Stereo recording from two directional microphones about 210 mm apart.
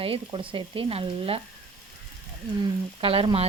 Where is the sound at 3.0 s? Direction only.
25° right (ahead or behind).